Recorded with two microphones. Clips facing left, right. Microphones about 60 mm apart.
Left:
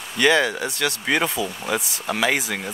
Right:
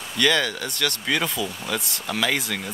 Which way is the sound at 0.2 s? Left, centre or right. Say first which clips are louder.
Left 3 dB; centre.